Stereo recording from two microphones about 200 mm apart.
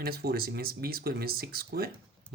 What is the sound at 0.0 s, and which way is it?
Speech, 50° right (ahead or behind).